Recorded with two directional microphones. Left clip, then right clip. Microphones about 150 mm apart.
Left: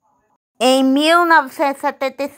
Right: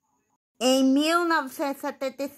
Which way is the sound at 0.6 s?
25° left (ahead or behind).